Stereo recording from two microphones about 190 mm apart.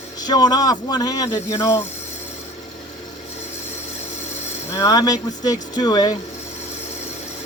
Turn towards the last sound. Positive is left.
turn(degrees=20)  # may be behind; listen again after turning